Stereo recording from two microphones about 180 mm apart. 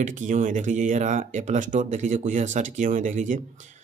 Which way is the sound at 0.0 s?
45° right (ahead or behind).